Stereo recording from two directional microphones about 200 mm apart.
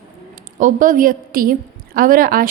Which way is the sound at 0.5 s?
40° right (ahead or behind).